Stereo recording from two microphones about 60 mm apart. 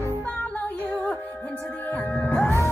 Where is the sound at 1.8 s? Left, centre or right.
Left.